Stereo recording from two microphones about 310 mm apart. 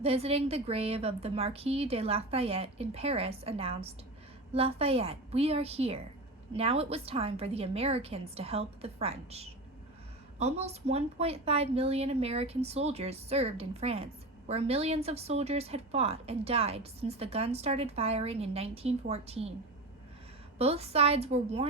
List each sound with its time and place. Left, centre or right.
0.0 s a woman's voice: centre
20.6 s a woman's voice: centre